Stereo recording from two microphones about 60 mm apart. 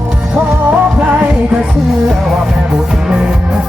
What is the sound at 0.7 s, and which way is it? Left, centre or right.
Music, right.